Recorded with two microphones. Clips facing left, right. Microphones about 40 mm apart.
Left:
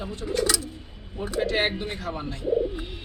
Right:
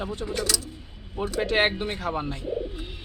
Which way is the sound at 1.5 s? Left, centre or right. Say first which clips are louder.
Right 2 dB; right.